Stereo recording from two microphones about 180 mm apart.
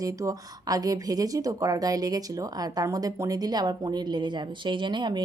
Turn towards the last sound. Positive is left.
turn(degrees=-25)  # may be behind; listen again after turning